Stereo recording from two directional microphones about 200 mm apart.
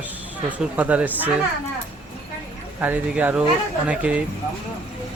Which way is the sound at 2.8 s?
10° right (ahead or behind).